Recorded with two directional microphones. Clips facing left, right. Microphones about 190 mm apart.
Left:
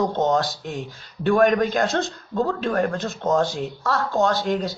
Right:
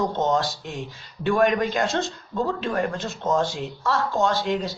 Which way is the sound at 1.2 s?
50° left (ahead or behind).